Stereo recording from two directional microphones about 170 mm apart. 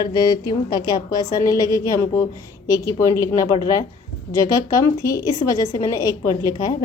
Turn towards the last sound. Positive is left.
turn(degrees=20)  # may be behind; listen again after turning